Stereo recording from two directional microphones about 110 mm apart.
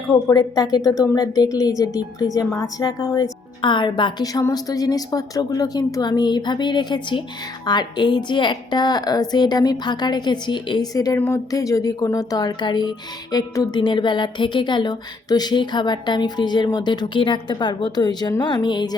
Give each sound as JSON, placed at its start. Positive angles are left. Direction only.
{"t": 0.1, "sound": "a woman's voice", "side_deg": 35}
{"t": 3.6, "sound": "a woman's voice", "side_deg": 45}
{"t": 10.9, "sound": "a woman's voice", "side_deg": 30}